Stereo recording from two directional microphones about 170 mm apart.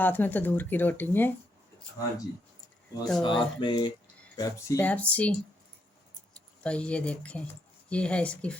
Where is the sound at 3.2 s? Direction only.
25° left (ahead or behind).